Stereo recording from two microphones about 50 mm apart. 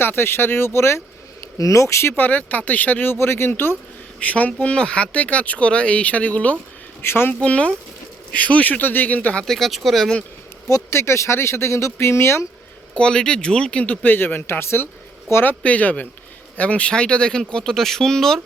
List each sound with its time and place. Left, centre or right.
0.0 s speech: left
1.7 s speech: left
2.1 s speech: left
3.1 s speech: left
4.2 s speech: left
7.0 s speech: left
7.4 s speech: left
8.8 s speech: left
9.4 s speech: centre
10.7 s speech: left
12.9 s speech: centre; by 14.4 s left
14.6 s speech: left
15.6 s speech: left; by 18.3 s centre